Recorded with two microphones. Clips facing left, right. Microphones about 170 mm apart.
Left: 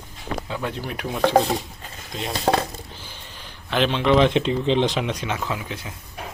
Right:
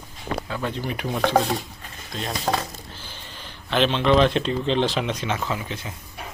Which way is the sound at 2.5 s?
35° left (ahead or behind).